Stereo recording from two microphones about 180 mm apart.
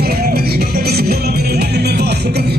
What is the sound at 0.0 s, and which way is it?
Music, 60° right (ahead or behind).